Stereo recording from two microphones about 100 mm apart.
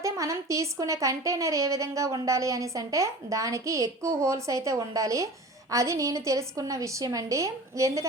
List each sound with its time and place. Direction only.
0.0 s speech: 30° right (ahead or behind)